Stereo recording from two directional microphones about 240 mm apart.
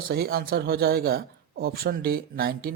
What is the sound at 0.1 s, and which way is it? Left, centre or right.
Speech, right.